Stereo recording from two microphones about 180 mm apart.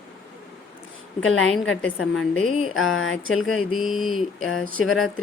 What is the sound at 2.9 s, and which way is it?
Speech, 90° left.